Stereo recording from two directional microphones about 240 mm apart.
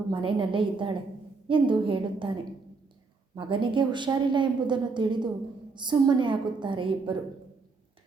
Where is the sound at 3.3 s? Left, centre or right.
Right.